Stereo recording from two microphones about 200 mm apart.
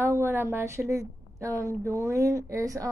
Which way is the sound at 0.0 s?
15° right (ahead or behind).